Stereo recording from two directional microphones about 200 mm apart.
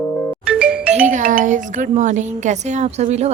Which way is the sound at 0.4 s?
5° right (ahead or behind).